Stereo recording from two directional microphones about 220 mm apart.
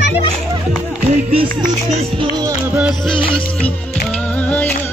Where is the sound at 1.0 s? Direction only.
25° right (ahead or behind).